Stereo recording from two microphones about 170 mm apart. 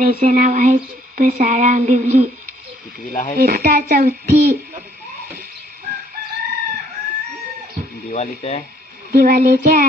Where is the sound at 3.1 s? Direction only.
50° left (ahead or behind).